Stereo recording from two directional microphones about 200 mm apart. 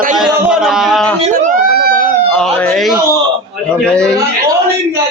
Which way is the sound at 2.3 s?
5° left (ahead or behind).